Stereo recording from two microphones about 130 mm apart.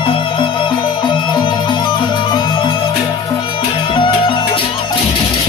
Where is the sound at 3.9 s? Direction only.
40° left (ahead or behind).